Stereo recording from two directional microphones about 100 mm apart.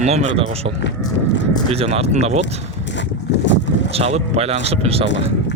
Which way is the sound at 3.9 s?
85° right.